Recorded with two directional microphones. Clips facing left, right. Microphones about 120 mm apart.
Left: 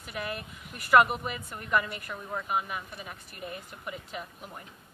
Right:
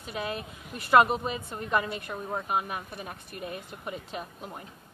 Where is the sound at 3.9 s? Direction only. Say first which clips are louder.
Right 2 dB; 30° right (ahead or behind).